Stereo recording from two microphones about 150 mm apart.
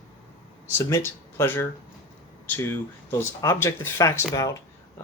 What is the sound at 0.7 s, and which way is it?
Speech, 15° left (ahead or behind).